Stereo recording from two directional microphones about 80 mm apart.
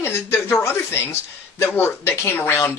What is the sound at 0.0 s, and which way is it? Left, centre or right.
Speech, left.